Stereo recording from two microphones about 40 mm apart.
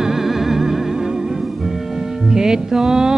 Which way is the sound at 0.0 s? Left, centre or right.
Centre.